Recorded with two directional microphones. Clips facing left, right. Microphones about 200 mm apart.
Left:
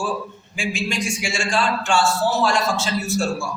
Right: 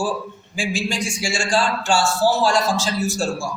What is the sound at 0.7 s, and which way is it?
A man's voice, 30° right (ahead or behind).